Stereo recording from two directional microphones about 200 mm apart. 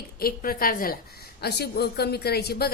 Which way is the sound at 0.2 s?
50° left (ahead or behind).